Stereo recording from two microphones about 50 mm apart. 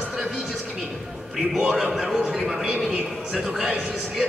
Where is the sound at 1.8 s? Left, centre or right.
Centre.